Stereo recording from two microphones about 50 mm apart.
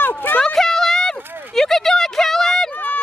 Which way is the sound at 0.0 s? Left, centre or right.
Left.